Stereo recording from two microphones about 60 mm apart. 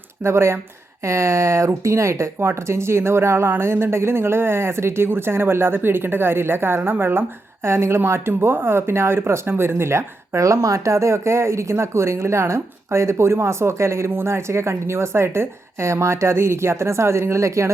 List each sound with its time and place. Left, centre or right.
0.2 s a woman's voice: right